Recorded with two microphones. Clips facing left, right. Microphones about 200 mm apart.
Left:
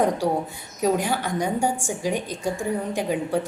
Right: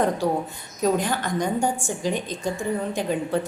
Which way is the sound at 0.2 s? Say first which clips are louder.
Even; 15° left (ahead or behind).